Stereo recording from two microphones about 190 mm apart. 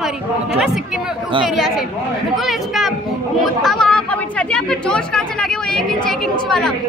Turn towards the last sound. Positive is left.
turn(degrees=0)  # may be behind; listen again after turning